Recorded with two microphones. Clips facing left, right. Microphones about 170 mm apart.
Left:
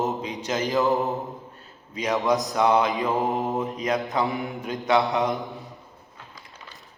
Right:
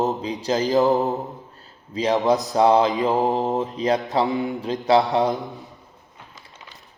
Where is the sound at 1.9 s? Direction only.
30° right (ahead or behind).